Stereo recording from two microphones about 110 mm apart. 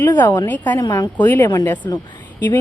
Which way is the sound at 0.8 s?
25° left (ahead or behind).